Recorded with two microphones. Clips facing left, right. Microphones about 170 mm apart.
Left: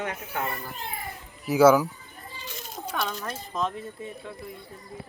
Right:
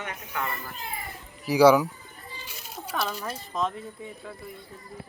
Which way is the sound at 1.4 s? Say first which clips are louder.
Even; centre (ahead or behind).